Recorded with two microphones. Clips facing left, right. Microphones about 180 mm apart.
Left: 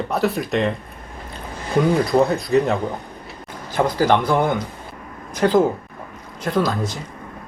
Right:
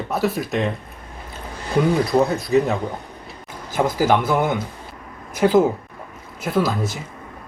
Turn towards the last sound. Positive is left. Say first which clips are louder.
# even
turn(degrees=-5)  # may be behind; listen again after turning